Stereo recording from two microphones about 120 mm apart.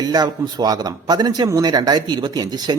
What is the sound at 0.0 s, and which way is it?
A man's voice, 35° right (ahead or behind).